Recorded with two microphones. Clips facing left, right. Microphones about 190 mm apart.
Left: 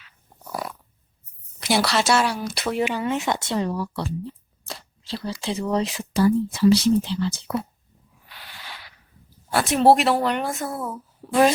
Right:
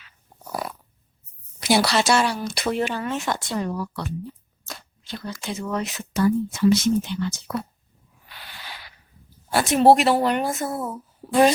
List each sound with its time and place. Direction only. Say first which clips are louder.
1.6 s speech: right 1 dB; centre (ahead or behind)
2.8 s speech: left 2 dB; 15° left (ahead or behind); by 7.5 s 30° left (ahead or behind)
9.5 s a child's voice: right 1 dB; centre (ahead or behind)